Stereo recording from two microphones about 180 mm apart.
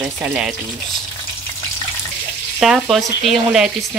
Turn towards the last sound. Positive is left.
turn(degrees=0)  # may be behind; listen again after turning